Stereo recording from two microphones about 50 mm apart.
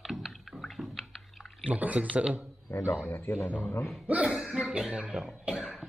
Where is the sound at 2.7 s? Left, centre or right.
Left.